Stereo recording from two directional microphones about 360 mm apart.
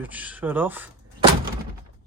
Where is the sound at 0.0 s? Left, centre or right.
Centre.